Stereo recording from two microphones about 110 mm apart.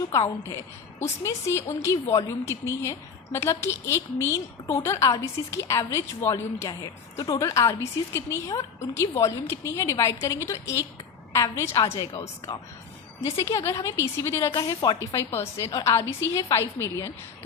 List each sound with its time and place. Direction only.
0.1 s a woman's voice: 25° left (ahead or behind)
13.2 s a woman's voice: 25° left (ahead or behind)